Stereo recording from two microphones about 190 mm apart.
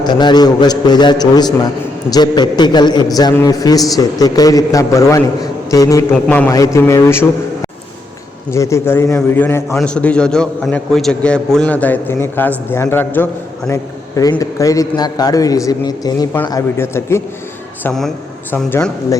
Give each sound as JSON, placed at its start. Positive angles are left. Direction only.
{"t": 0.0, "sound": "a man's voice", "side_deg": 25}
{"t": 17.8, "sound": "a man's voice", "side_deg": 0}